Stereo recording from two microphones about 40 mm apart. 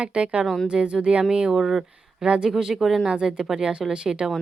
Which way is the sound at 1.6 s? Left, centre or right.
Centre.